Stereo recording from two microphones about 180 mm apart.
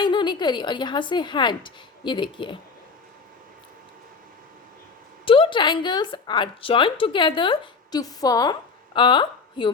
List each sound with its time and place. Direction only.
0.0 s speech: 25° left (ahead or behind)
5.2 s a woman's voice: 30° left (ahead or behind)